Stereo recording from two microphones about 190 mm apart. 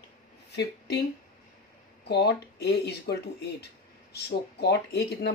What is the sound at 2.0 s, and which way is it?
Speech, 60° left (ahead or behind).